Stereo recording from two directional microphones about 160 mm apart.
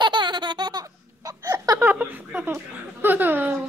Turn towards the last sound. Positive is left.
turn(degrees=-10)  # may be behind; listen again after turning